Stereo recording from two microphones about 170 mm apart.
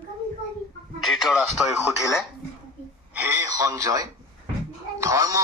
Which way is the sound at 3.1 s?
15° right (ahead or behind).